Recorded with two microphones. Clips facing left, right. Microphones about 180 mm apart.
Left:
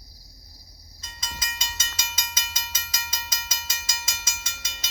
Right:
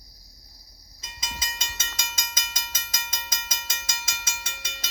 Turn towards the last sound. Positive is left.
turn(degrees=-60)  # may be behind; listen again after turning